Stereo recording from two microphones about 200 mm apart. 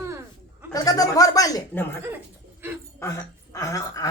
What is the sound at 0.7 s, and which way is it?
Speech, 20° left (ahead or behind).